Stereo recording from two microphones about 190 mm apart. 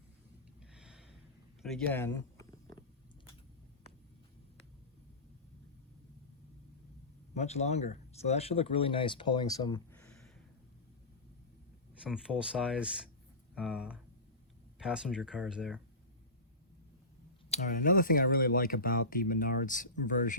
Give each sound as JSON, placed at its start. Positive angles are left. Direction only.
{"t": 0.6, "sound": "gasp", "side_deg": -5}
{"t": 1.6, "sound": "a sound", "side_deg": 5}
{"t": 7.3, "sound": "speech", "side_deg": 35}
{"t": 12.0, "sound": "speech", "side_deg": -5}
{"t": 17.5, "sound": "speech", "side_deg": 40}